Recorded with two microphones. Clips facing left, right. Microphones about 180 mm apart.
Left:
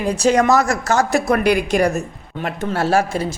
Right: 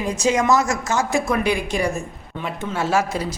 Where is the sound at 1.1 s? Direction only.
70° left (ahead or behind).